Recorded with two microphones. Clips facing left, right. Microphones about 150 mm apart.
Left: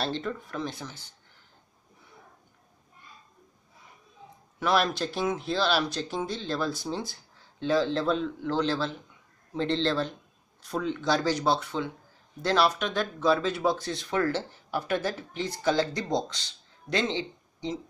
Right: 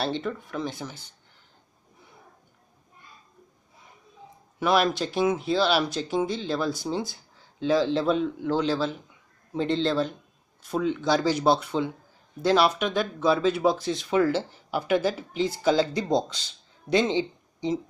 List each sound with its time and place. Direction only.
0.0 s speech: 5° right (ahead or behind)
4.6 s speech: 5° right (ahead or behind)
16.9 s speech: 20° right (ahead or behind)